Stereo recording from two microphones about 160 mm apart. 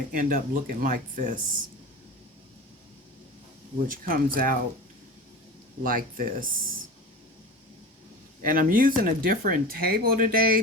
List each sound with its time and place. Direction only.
0.1 s speech: 60° right (ahead or behind)
3.8 s speech: 60° right (ahead or behind)
5.8 s speech: 60° right (ahead or behind)
8.4 s speech: 60° right (ahead or behind)